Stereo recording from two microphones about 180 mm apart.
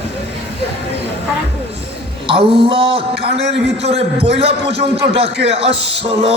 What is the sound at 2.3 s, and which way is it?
Speech, 30° right (ahead or behind).